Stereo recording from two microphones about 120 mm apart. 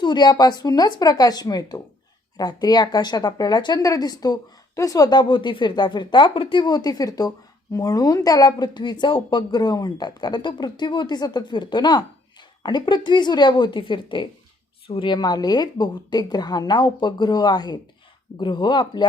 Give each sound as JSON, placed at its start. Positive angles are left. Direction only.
{"t": 0.0, "sound": "speech", "side_deg": 35}